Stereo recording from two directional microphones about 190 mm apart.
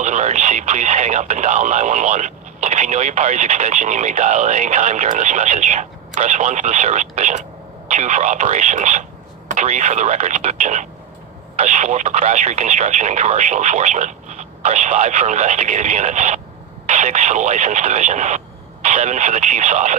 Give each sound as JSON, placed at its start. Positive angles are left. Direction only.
{"t": 0.0, "sound": "speech", "side_deg": -40}